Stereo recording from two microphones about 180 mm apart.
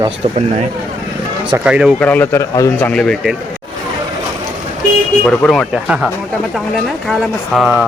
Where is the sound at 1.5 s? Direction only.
5° right (ahead or behind).